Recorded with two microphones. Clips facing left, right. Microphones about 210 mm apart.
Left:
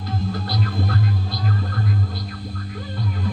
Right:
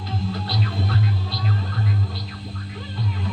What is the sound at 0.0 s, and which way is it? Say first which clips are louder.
Music: left 2 dB; 50° left (ahead or behind).